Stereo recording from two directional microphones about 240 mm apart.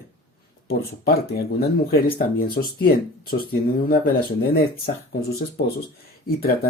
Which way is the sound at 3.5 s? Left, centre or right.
Left.